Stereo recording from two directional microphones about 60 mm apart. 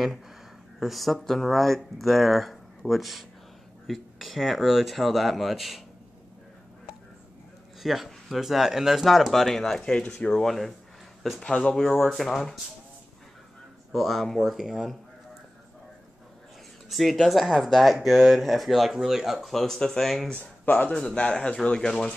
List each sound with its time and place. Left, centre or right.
0.7 s speech: centre
7.8 s speech: centre; by 10.3 s left
10.3 s speech: centre
13.9 s speech: centre
16.9 s speech: centre
20.6 s a man's voice: left
20.9 s speech: centre